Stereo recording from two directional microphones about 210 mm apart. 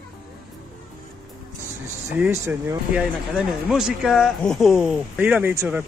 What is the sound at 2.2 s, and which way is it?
Speech, 10° right (ahead or behind).